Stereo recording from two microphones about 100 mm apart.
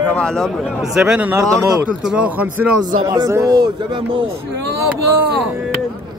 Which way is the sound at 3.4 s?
50° right (ahead or behind).